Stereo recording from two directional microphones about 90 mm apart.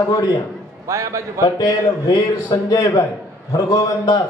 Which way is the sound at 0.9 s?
35° right (ahead or behind).